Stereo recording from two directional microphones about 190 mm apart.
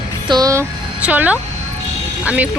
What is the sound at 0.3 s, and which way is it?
Speech, 20° right (ahead or behind).